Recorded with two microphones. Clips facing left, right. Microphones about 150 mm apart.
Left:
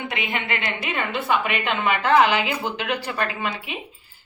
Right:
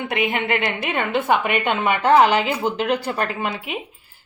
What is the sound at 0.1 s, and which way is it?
A woman's voice, 50° right (ahead or behind).